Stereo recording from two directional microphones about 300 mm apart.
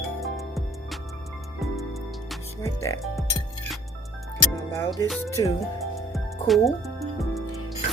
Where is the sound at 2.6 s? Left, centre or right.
Centre.